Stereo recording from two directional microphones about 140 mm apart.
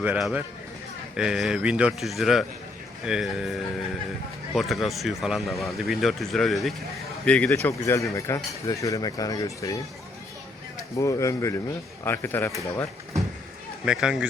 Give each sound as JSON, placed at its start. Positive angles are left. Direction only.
{"t": 0.0, "sound": "speech", "side_deg": -5}
{"t": 7.5, "sound": "speech", "side_deg": 20}
{"t": 10.8, "sound": "speech", "side_deg": 25}
{"t": 13.8, "sound": "speech", "side_deg": -5}